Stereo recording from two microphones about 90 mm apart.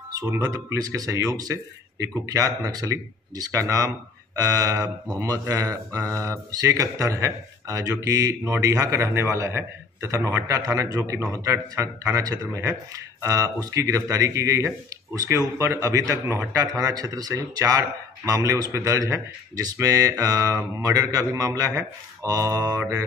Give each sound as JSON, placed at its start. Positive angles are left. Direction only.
{"t": 0.5, "sound": "speech", "side_deg": -40}